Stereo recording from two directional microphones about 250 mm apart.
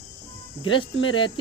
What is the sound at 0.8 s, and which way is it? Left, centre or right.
Speech, left.